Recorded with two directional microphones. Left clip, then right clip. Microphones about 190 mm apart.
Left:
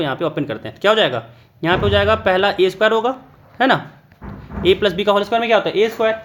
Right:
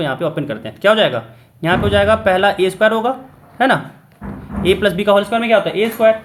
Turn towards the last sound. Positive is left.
turn(degrees=40)  # may be behind; listen again after turning